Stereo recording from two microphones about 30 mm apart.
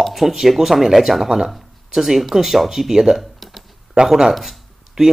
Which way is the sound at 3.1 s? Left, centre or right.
Centre.